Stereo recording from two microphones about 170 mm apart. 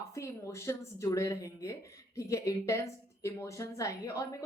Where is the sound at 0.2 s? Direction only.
15° left (ahead or behind).